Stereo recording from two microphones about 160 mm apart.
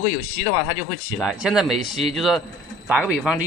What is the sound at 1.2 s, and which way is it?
Speech, 5° right (ahead or behind).